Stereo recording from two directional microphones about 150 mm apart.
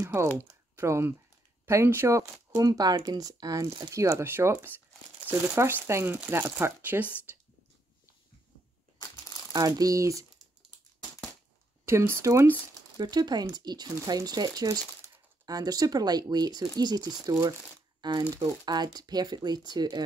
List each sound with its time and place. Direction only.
0.0 s speech: 20° right (ahead or behind)
7.3 s a sound: 15° right (ahead or behind)
9.5 s speech: 25° right (ahead or behind)
11.8 s speech: 15° right (ahead or behind)